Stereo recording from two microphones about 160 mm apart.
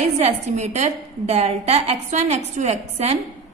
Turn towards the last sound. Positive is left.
turn(degrees=-45)  # may be behind; listen again after turning